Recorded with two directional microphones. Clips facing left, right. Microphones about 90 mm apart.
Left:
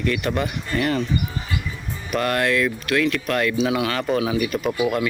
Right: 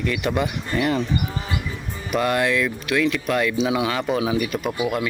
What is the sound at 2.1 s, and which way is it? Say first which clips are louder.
Speech: right 1 dB; 15° right (ahead or behind).